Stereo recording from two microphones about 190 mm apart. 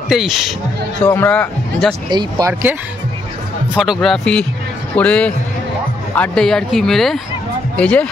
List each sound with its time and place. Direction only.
0.1 s a man's voice: centre (ahead or behind)
2.0 s speech: 20° right (ahead or behind)
3.7 s a man's voice: centre (ahead or behind)